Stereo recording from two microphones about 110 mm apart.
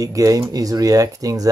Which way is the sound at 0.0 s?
30° right (ahead or behind).